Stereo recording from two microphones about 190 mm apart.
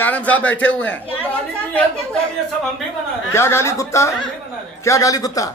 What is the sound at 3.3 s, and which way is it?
A man's voice, 15° left (ahead or behind).